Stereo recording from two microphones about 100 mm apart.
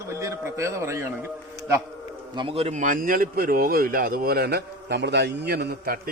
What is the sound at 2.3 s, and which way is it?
Speech, 55° right (ahead or behind).